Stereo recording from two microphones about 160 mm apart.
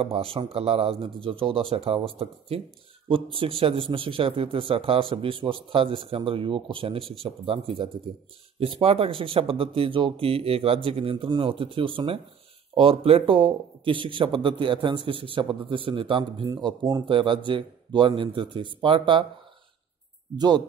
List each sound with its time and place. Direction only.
0.0 s a man's voice: 35° right (ahead or behind)
16.4 s a man's voice: 20° right (ahead or behind)
20.3 s speech: 25° right (ahead or behind)